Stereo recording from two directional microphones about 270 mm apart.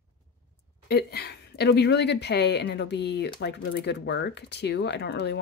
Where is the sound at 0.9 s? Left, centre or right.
Left.